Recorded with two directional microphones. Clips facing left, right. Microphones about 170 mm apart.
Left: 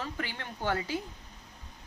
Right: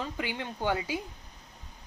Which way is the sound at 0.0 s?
15° right (ahead or behind).